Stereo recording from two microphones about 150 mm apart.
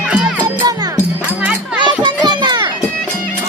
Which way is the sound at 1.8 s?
30° right (ahead or behind).